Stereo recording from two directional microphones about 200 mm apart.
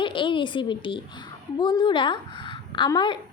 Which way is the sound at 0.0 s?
25° left (ahead or behind).